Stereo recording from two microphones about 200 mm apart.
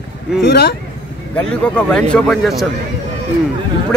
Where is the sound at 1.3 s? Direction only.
5° left (ahead or behind).